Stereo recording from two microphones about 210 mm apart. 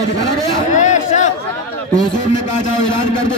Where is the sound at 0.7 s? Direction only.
35° left (ahead or behind).